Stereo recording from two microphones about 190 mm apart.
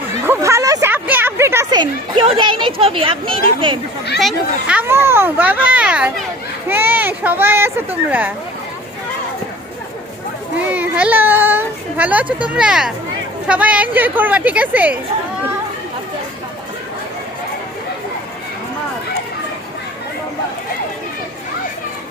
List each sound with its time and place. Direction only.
0.3 s a sound: 15° right (ahead or behind)
4.2 s a child's voice: 5° right (ahead or behind)
10.6 s a child's voice: 5° right (ahead or behind)